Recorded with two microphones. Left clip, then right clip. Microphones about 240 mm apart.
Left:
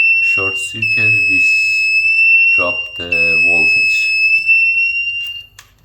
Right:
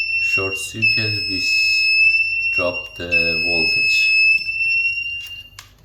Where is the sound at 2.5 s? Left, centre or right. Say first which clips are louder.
Left 7 dB; centre.